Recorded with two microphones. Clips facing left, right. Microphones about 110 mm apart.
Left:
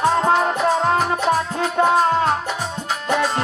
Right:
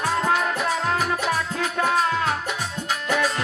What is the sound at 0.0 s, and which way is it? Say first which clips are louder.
Music: left 6 dB; 30° left (ahead or behind).